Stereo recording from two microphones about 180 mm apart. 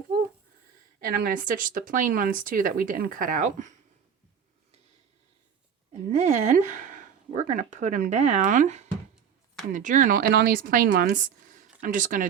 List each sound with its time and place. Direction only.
1.0 s speech: 55° right (ahead or behind)
5.9 s speech: 40° right (ahead or behind)